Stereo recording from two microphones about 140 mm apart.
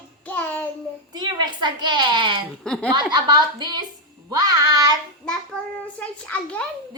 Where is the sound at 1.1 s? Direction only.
30° right (ahead or behind).